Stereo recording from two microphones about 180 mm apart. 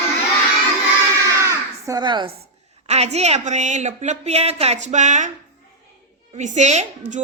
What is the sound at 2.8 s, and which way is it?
A woman's voice, 35° right (ahead or behind).